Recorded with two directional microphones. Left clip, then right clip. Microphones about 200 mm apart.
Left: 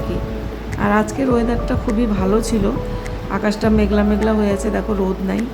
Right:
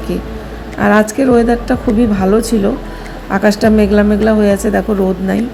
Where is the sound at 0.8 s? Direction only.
15° right (ahead or behind).